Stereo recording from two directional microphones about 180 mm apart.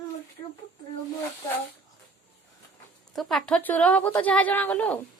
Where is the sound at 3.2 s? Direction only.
Centre (ahead or behind).